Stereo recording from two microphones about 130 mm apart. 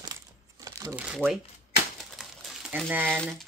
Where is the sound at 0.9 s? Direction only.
10° right (ahead or behind).